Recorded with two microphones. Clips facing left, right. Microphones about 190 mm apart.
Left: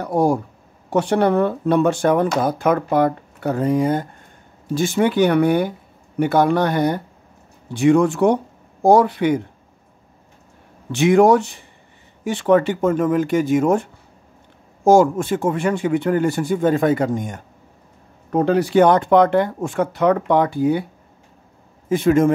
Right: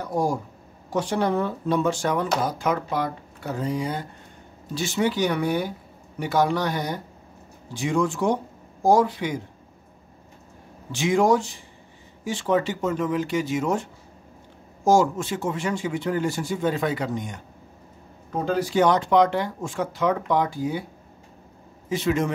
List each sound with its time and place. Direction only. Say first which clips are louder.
0.0 s speech: left 7 dB; 65° left (ahead or behind)
10.9 s speech: left 7 dB; 60° left (ahead or behind)
14.9 s speech: left 6 dB; 55° left (ahead or behind)
18.3 s speech: left 8 dB; 65° left (ahead or behind)
21.8 s a man's voice: left 8 dB; 50° left (ahead or behind)